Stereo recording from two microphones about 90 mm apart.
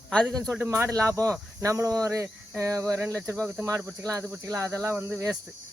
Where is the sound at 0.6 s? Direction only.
25° right (ahead or behind).